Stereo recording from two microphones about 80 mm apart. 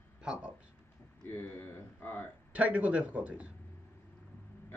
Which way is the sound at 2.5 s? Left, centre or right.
Centre.